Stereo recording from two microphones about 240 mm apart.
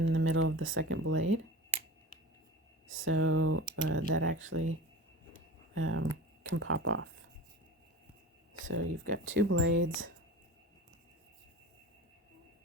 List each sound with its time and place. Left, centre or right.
0.0 s speech: right
2.8 s speech: right
8.6 s speech: right